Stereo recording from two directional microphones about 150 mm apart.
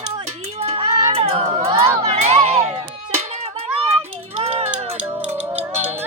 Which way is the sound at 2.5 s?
25° right (ahead or behind).